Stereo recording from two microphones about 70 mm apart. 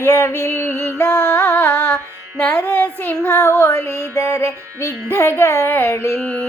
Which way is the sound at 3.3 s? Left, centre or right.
Left.